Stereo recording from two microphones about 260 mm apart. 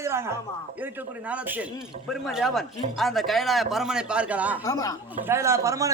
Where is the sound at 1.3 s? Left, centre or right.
Centre.